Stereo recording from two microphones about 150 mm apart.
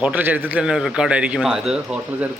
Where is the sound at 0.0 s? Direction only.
10° right (ahead or behind).